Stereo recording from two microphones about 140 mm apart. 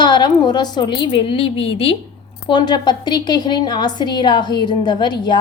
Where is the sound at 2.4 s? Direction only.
30° left (ahead or behind).